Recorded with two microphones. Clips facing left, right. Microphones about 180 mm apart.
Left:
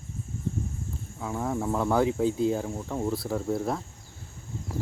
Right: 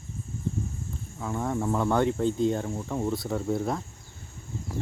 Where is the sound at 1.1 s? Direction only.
Centre (ahead or behind).